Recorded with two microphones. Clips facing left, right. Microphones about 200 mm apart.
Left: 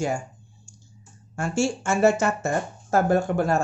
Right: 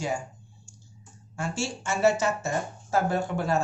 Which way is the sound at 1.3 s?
50° left (ahead or behind).